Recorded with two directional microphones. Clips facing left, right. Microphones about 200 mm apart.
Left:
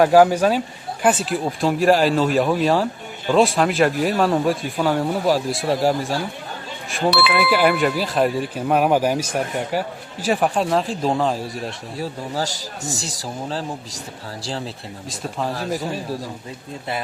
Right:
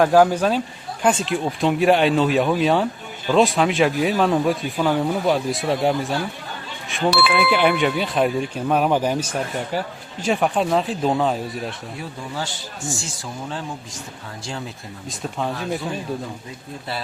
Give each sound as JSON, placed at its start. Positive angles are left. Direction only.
{"t": 0.0, "sound": "speech", "side_deg": 10}
{"t": 7.3, "sound": "speech", "side_deg": 5}
{"t": 11.9, "sound": "speech", "side_deg": 40}
{"t": 15.1, "sound": "speech", "side_deg": 0}